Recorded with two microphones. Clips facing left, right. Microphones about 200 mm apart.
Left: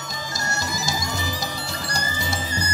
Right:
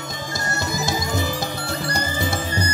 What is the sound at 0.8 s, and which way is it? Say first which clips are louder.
Music: right 5 dB; 55° right (ahead or behind).